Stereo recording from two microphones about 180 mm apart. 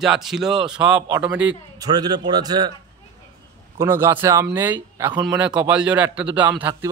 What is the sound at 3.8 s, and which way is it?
Speech, 15° right (ahead or behind).